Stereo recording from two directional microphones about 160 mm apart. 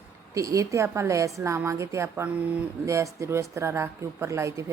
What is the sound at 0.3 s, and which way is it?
A woman's voice, 20° right (ahead or behind).